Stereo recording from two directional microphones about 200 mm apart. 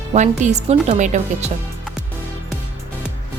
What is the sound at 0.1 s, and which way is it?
A woman's voice, 35° right (ahead or behind).